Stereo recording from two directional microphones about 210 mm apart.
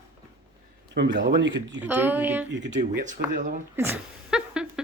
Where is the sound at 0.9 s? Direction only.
50° right (ahead or behind).